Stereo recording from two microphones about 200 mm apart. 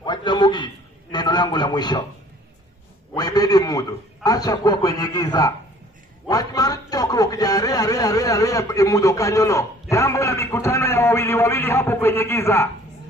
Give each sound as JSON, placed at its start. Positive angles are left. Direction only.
{"t": 0.0, "sound": "a sound", "side_deg": 20}
{"t": 1.1, "sound": "a man's voice", "side_deg": 20}
{"t": 3.2, "sound": "a man's voice", "side_deg": 20}